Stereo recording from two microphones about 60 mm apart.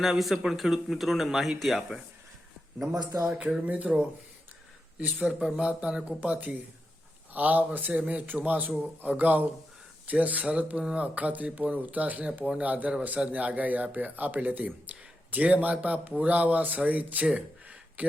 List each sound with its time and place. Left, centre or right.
0.0 s speech: centre
2.9 s speech: right
3.2 s speech: centre
5.2 s speech: centre
5.5 s speech: centre